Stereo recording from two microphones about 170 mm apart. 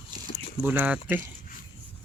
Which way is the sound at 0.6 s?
10° right (ahead or behind).